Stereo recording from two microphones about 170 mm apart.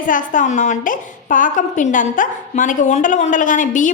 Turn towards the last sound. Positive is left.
turn(degrees=50)  # may be behind; listen again after turning